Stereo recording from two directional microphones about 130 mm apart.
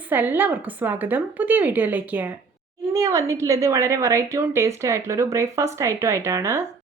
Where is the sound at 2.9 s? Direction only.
25° right (ahead or behind).